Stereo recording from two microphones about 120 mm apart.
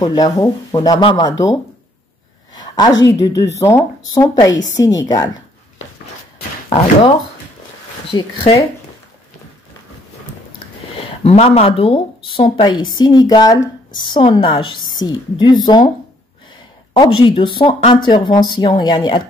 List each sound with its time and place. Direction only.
0.0 s a woman's voice: 30° left (ahead or behind)
6.7 s speech: 50° left (ahead or behind)
11.0 s a woman's voice: 55° left (ahead or behind); by 15.8 s 40° left (ahead or behind)
16.9 s a woman's voice: 40° left (ahead or behind)